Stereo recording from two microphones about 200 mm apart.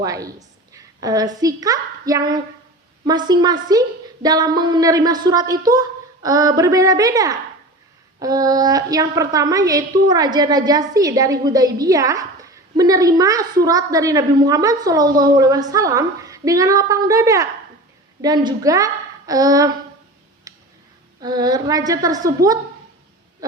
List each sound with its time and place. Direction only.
0.0 s a woman's voice: 15° right (ahead or behind)
20.5 s tick-tock: 15° right (ahead or behind)
21.2 s a woman's voice: 20° right (ahead or behind)
23.4 s a sound: 15° right (ahead or behind)